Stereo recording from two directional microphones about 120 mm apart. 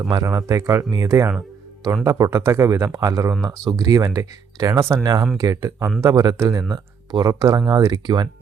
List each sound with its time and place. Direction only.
0.1 s speech: 30° right (ahead or behind)
1.4 s music: 25° right (ahead or behind)
2.0 s speech: 30° right (ahead or behind)